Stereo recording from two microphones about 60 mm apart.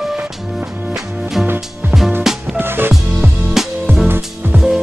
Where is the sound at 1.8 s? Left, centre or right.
Right.